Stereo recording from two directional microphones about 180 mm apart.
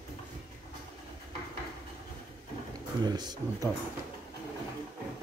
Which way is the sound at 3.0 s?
20° right (ahead or behind).